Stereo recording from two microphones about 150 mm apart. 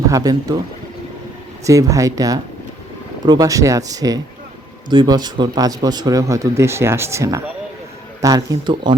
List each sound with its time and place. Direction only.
0.1 s speech: 25° right (ahead or behind)
1.6 s speech: 20° right (ahead or behind)